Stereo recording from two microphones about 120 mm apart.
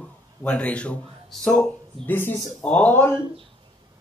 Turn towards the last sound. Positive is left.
turn(degrees=15)  # may be behind; listen again after turning